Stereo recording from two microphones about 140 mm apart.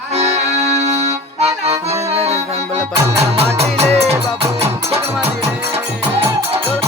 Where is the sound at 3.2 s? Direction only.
50° right (ahead or behind).